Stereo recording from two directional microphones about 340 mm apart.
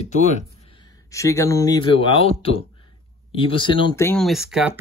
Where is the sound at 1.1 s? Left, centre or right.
Centre.